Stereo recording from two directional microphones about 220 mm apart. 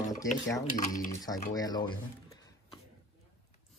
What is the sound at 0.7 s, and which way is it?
Speech, 35° left (ahead or behind).